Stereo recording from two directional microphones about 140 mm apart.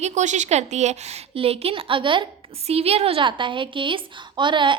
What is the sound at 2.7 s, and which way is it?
A woman's voice, 45° right (ahead or behind).